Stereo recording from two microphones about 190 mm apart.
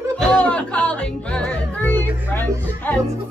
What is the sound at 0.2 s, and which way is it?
Music, 5° left (ahead or behind).